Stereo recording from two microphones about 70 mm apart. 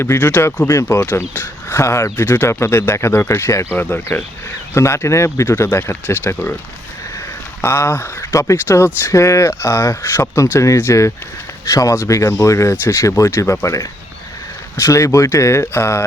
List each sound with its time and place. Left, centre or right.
0.0 s speech: left
0.7 s speech: left
3.8 s speech: left
4.7 s speech: left
7.6 s speech: left
8.3 s speech: left
8.5 s speech: left